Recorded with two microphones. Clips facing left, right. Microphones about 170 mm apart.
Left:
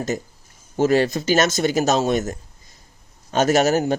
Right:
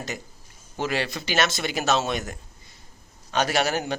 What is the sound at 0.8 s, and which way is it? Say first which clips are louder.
Speech: left 10 dB; 45° left (ahead or behind).